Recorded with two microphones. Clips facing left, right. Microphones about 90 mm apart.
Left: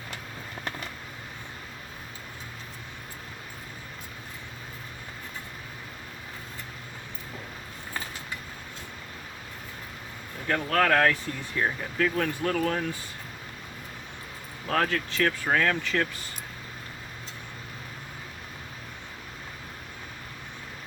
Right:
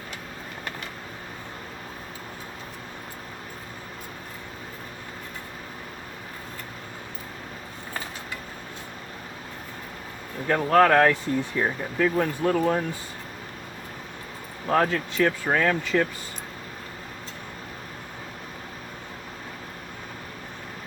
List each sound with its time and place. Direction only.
10.6 s speech: 25° right (ahead or behind)
14.7 s speech: 15° right (ahead or behind)